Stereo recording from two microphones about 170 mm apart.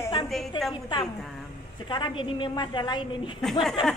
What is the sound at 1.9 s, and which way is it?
A woman's voice, 30° left (ahead or behind).